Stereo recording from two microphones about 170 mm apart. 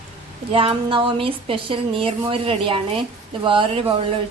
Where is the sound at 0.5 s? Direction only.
30° right (ahead or behind).